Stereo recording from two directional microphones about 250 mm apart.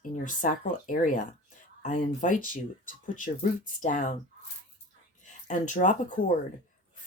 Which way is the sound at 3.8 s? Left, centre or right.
Left.